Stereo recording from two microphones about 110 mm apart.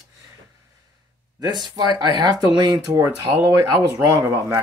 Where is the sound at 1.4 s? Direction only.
40° right (ahead or behind).